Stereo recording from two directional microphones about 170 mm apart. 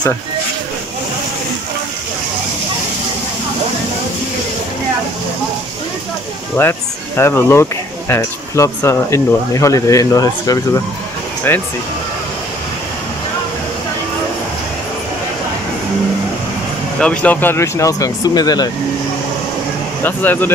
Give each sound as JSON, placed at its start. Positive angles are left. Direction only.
{"t": 6.6, "sound": "speech", "side_deg": 15}
{"t": 17.0, "sound": "speech", "side_deg": 5}
{"t": 20.0, "sound": "speech", "side_deg": 10}